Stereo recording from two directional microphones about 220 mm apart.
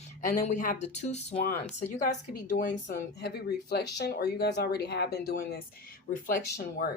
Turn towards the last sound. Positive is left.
turn(degrees=40)  # may be behind; listen again after turning